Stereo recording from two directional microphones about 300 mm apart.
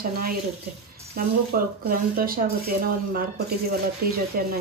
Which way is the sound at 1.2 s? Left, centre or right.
Right.